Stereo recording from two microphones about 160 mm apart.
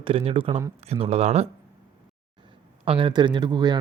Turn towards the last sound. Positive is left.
turn(degrees=-25)  # may be behind; listen again after turning